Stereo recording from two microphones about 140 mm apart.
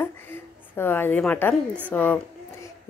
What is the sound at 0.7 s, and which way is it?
A woman's voice, 15° left (ahead or behind).